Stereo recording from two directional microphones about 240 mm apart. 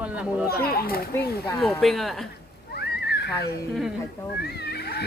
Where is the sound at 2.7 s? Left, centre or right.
Left.